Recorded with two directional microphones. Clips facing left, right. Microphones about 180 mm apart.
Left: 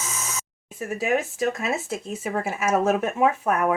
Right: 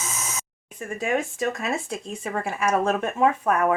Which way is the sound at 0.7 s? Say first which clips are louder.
Left 2 dB; 5° left (ahead or behind).